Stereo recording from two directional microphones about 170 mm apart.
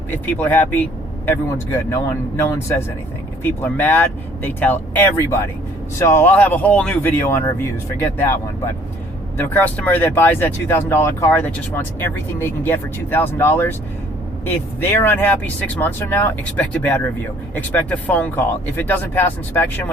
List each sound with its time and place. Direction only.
0.3 s speech: 10° left (ahead or behind)
9.5 s speech: 10° left (ahead or behind)
14.8 s speech: 15° left (ahead or behind)